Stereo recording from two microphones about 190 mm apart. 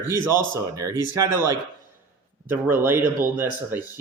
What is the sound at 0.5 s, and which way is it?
Speech, 15° right (ahead or behind).